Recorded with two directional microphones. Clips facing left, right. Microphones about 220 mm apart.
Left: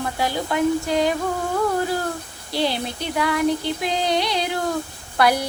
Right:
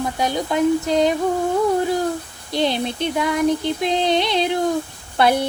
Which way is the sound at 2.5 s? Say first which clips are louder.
Right 3 dB; 20° right (ahead or behind).